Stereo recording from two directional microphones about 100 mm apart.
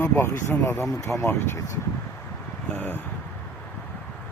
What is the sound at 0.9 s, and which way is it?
Speech, 30° left (ahead or behind).